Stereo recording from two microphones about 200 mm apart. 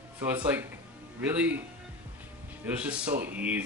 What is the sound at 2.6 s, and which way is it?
Speech, 5° right (ahead or behind).